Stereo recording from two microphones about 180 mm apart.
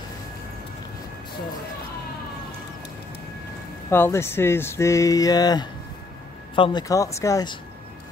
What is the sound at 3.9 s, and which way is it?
Speech, 15° left (ahead or behind).